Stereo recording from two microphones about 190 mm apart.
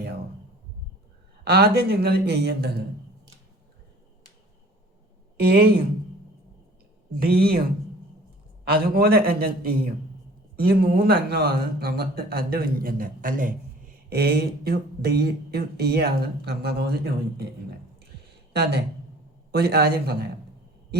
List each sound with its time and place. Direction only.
1.5 s speech: 55° right (ahead or behind)
7.2 s speech: 55° right (ahead or behind)
8.6 s speech: 50° right (ahead or behind)
18.5 s speech: 60° right (ahead or behind)